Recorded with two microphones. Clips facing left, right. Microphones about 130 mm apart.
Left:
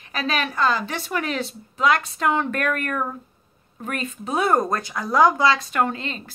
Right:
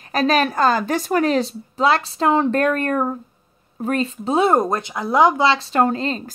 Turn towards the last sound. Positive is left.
turn(degrees=-35)  # may be behind; listen again after turning